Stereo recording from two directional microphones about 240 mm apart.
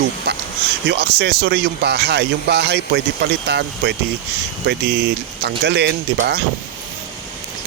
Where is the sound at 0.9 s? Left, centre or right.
Right.